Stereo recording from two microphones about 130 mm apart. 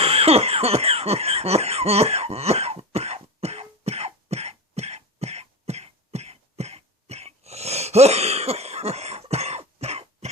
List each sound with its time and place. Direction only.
0.0 s cough: 50° right (ahead or behind)